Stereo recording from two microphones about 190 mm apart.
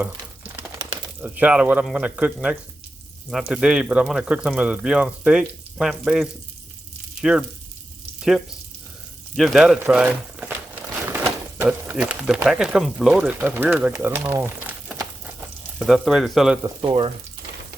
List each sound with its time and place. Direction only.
0.0 s a sound: 10° right (ahead or behind)
1.2 s speech: 5° right (ahead or behind)
9.3 s speech: centre (ahead or behind)
15.8 s speech: centre (ahead or behind)
16.6 s speech: 25° right (ahead or behind)